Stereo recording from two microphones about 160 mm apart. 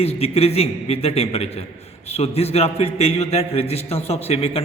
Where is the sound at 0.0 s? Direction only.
40° left (ahead or behind).